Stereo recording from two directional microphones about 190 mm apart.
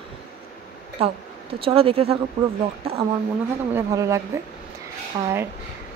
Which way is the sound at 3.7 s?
15° right (ahead or behind).